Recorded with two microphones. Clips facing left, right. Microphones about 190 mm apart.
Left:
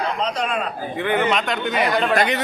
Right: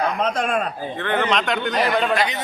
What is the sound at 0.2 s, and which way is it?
Speech, 50° right (ahead or behind).